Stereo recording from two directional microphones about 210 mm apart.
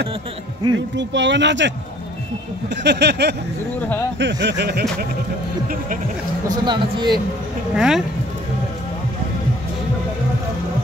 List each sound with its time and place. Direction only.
0.6 s speech: 20° right (ahead or behind)
0.9 s speech: 60° right (ahead or behind)
2.7 s speech: 55° right (ahead or behind)
6.4 s speech: 20° right (ahead or behind)
7.7 s speech: 5° right (ahead or behind)